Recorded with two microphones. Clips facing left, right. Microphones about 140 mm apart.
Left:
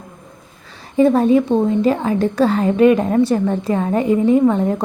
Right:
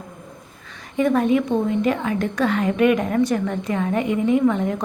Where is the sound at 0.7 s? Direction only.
30° left (ahead or behind).